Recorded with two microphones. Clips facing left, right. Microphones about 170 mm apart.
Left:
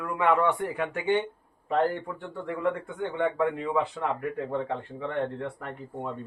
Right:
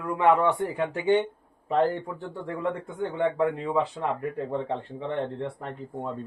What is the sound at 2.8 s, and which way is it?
Speech, 35° right (ahead or behind).